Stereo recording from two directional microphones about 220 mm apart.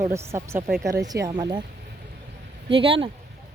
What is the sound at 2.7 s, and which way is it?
Speech, 25° right (ahead or behind).